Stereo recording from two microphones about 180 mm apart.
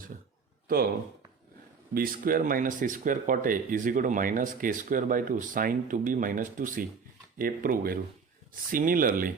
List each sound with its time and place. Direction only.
0.7 s speech: 50° right (ahead or behind)
1.9 s speech: 55° right (ahead or behind)